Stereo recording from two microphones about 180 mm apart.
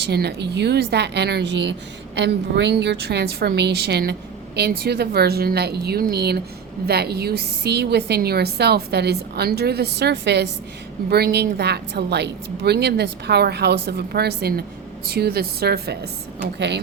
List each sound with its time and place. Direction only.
0.0 s a woman's voice: 65° right (ahead or behind)
16.6 s a woman's voice: 75° right (ahead or behind)